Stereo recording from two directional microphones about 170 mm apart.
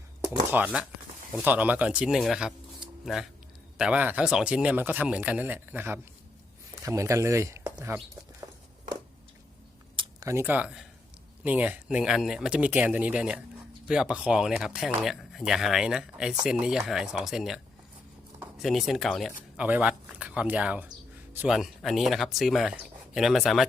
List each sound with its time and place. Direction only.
0.5 s speech: 10° right (ahead or behind)
3.8 s speech: 5° right (ahead or behind)
8.4 s a sound: 15° right (ahead or behind)
9.9 s a sound: 30° right (ahead or behind)
10.2 s speech: 15° right (ahead or behind)
18.6 s speech: centre (ahead or behind)